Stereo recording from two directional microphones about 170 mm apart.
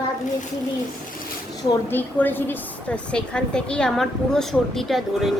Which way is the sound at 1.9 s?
10° left (ahead or behind).